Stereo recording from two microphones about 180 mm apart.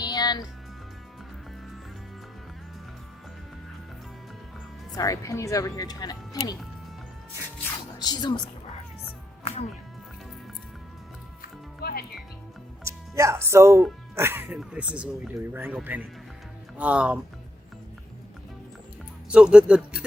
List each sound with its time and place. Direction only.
0.0 s music: 20° left (ahead or behind)
4.9 s speech: 20° left (ahead or behind)
7.9 s speech: 25° left (ahead or behind)
11.8 s music: 60° left (ahead or behind)
12.8 s speech: 15° right (ahead or behind)
19.3 s speech: 5° right (ahead or behind)